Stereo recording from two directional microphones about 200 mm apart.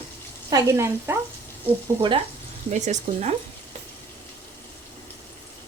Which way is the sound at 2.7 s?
35° right (ahead or behind).